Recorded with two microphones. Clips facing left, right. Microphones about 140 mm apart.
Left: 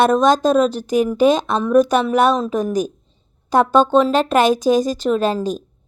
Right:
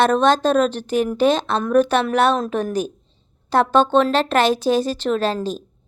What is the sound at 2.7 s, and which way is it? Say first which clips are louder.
Speech: left 3 dB; 40° left (ahead or behind).